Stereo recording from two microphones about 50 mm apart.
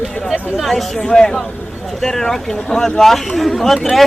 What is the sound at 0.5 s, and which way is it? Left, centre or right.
Speech, centre.